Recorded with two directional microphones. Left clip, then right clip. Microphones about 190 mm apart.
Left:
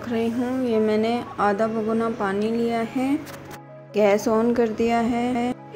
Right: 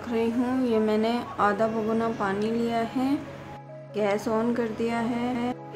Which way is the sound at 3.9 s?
25° left (ahead or behind).